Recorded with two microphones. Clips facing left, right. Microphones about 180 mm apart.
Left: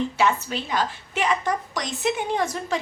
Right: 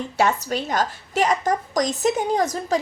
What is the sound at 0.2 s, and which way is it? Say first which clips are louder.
A woman's voice: right 5 dB; 40° right (ahead or behind).